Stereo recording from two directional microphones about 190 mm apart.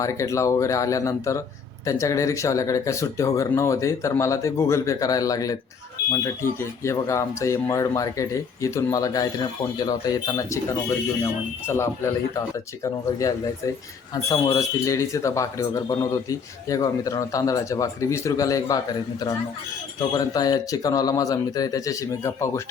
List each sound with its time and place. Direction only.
0.0 s speech: 15° left (ahead or behind)